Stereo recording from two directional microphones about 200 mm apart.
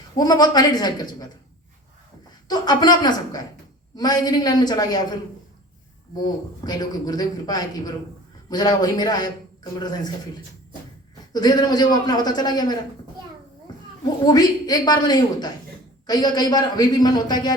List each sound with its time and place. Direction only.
0.2 s a man's voice: 20° left (ahead or behind)
2.5 s a man's voice: 20° left (ahead or behind)
11.3 s a man's voice: 20° left (ahead or behind)
14.3 s a man's voice: 20° left (ahead or behind)